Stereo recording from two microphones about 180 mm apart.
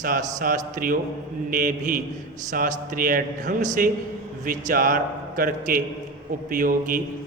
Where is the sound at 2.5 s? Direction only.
50° right (ahead or behind).